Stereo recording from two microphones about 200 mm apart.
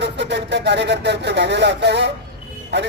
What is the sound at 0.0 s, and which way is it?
A man's voice, 60° right (ahead or behind).